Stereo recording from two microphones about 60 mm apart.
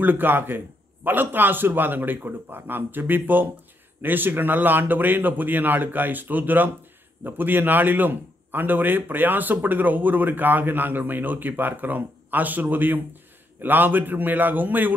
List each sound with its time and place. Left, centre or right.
0.0 s a man's voice: right